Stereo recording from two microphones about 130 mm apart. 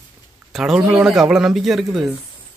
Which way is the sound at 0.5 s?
5° right (ahead or behind).